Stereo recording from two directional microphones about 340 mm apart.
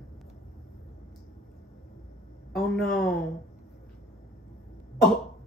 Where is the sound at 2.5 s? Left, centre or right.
Centre.